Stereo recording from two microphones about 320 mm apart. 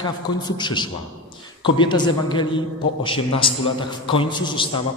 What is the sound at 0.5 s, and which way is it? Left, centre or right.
A man's voice, centre.